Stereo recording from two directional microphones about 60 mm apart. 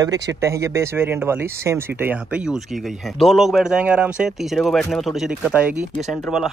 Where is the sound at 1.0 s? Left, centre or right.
Right.